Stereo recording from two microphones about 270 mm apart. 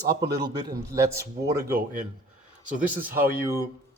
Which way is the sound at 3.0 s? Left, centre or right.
Centre.